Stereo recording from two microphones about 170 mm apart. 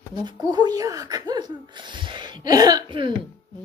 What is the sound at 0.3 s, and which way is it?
Speech, 25° right (ahead or behind).